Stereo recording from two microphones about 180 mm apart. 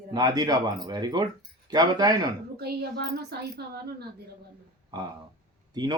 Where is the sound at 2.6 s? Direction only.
60° right (ahead or behind).